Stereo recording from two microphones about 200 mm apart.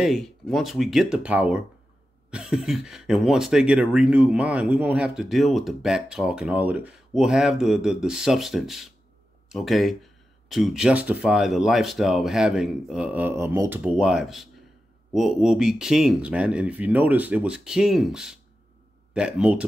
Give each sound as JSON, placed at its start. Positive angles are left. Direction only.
{"t": 0.0, "sound": "speech", "side_deg": 0}